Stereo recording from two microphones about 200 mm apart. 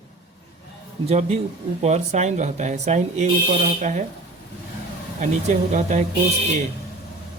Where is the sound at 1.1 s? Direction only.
30° right (ahead or behind).